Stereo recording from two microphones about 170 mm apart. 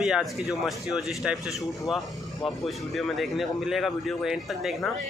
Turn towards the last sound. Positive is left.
turn(degrees=0)  # may be behind; listen again after turning